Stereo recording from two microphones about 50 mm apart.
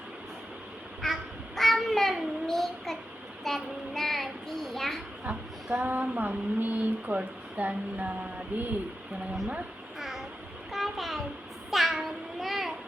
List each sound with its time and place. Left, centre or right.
1.0 s child singing: centre
5.8 s speech: right
10.0 s a sound: centre